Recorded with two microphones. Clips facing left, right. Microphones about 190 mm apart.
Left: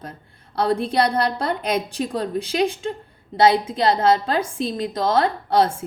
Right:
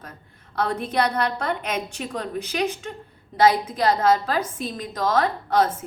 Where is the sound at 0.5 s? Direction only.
30° left (ahead or behind).